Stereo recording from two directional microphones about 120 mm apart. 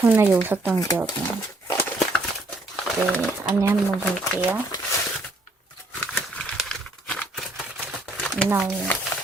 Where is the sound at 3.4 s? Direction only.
25° right (ahead or behind).